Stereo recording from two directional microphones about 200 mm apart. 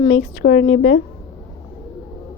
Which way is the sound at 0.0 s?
50° left (ahead or behind).